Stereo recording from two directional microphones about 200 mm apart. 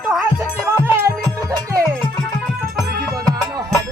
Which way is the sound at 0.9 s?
15° right (ahead or behind).